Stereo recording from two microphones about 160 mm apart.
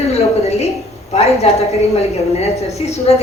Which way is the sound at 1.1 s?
40° left (ahead or behind).